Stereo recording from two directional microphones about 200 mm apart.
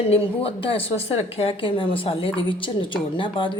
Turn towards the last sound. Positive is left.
turn(degrees=25)  # may be behind; listen again after turning